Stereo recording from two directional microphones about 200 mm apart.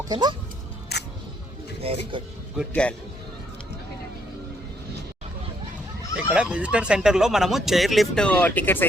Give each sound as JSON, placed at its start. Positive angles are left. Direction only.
{"t": 0.0, "sound": "speech", "side_deg": -20}
{"t": 0.9, "sound": "single-lens reflex camera", "side_deg": 55}
{"t": 1.8, "sound": "speech", "side_deg": -30}
{"t": 2.6, "sound": "speech", "side_deg": 5}
{"t": 6.3, "sound": "speech", "side_deg": -5}